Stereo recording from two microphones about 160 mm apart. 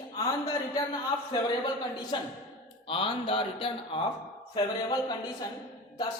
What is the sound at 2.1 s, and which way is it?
A man's voice, 30° left (ahead or behind).